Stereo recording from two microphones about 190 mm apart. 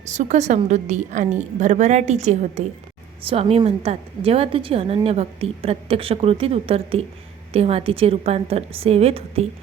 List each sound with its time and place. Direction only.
0.0 s a woman's voice: 35° right (ahead or behind)